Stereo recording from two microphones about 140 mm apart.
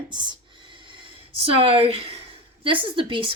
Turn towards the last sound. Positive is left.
turn(degrees=-35)  # may be behind; listen again after turning